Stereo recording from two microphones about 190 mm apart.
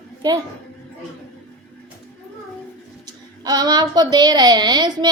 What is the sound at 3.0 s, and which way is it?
A child's voice, 20° right (ahead or behind).